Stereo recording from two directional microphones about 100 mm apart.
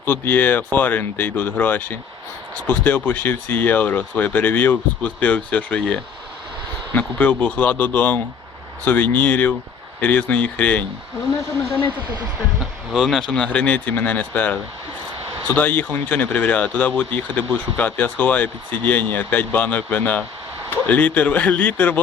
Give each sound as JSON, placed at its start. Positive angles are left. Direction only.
{"t": 0.0, "sound": "speech", "side_deg": 20}
{"t": 12.9, "sound": "speech", "side_deg": 0}